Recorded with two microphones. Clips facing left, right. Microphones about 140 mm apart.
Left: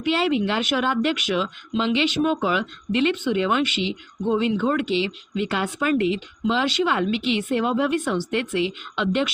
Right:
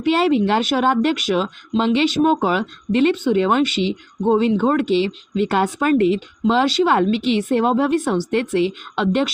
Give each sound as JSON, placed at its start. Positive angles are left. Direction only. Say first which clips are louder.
{"t": 0.0, "sound": "speech", "louder": "right 5 dB", "side_deg": -45}